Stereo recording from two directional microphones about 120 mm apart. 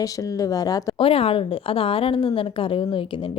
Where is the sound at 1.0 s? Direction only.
50° left (ahead or behind).